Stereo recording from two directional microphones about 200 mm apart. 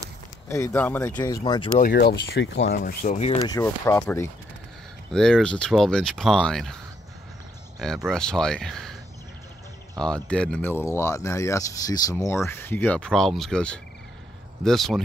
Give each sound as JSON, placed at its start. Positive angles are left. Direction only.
{"t": 0.5, "sound": "speech", "side_deg": 15}
{"t": 1.2, "sound": "speech", "side_deg": 20}
{"t": 1.8, "sound": "speech", "side_deg": 50}
{"t": 2.7, "sound": "speech", "side_deg": 45}
{"t": 3.2, "sound": "speech", "side_deg": 30}
{"t": 3.5, "sound": "speech", "side_deg": 15}
{"t": 7.8, "sound": "speech", "side_deg": 0}
{"t": 10.0, "sound": "speech", "side_deg": 5}